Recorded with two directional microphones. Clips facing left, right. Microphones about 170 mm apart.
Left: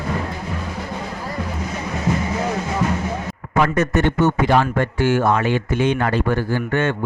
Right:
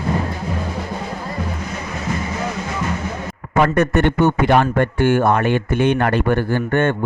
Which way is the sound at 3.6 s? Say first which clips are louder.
Right 2 dB; 60° right (ahead or behind).